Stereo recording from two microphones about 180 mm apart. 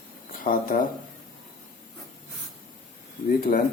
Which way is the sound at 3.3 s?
50° left (ahead or behind).